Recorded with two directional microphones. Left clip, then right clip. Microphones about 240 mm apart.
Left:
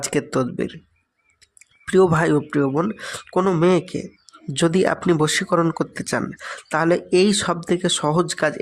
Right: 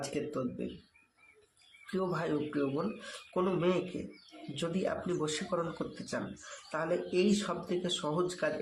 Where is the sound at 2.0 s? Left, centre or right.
Left.